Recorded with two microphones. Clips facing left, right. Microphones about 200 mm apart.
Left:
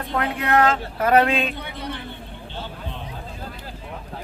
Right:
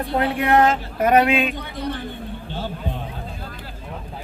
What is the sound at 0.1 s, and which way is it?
Speech, 30° right (ahead or behind).